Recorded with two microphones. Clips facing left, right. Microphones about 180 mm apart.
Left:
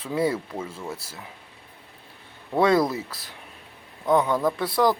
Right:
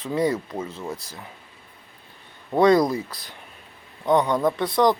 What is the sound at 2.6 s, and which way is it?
Speech, 5° left (ahead or behind).